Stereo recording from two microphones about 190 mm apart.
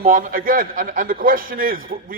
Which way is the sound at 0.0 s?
45° right (ahead or behind).